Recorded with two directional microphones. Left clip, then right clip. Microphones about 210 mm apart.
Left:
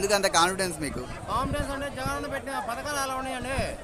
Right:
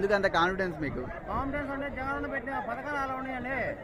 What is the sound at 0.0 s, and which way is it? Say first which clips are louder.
Speech: left 3 dB; 10° left (ahead or behind).